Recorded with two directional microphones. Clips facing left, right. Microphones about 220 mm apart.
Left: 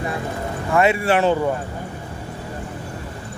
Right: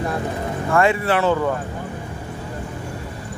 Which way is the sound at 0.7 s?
20° left (ahead or behind).